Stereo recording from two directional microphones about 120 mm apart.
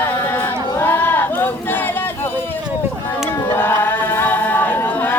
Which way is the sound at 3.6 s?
15° left (ahead or behind).